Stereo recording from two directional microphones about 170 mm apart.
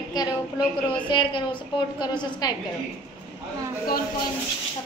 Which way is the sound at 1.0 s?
30° left (ahead or behind).